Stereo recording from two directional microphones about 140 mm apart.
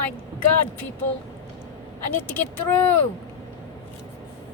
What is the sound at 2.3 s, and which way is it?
Speech, 15° left (ahead or behind).